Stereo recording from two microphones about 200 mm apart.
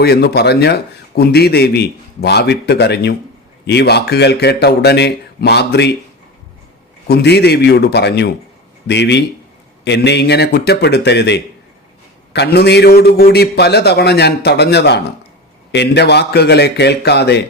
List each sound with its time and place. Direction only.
0.0 s a man's voice: 55° left (ahead or behind)
7.1 s a man's voice: 55° left (ahead or behind)